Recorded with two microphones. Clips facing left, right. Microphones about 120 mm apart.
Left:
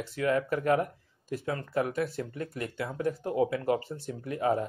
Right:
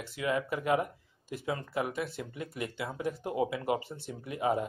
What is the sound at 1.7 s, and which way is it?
Speech, 5° right (ahead or behind).